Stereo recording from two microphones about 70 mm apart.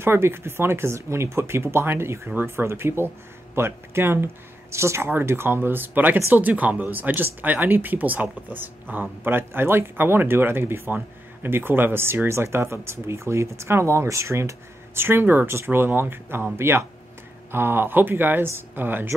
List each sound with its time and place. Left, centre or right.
0.0 s speech: right
15.0 s speech: right